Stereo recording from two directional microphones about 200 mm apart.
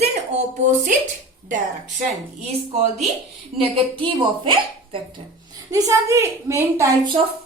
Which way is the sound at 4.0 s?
25° right (ahead or behind).